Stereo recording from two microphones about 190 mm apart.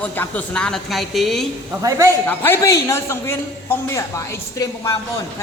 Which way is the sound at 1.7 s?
15° right (ahead or behind).